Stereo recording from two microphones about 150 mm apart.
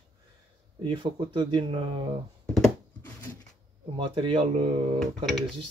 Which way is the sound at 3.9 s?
35° right (ahead or behind).